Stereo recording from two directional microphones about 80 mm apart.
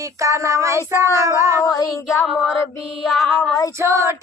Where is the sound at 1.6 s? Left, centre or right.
Left.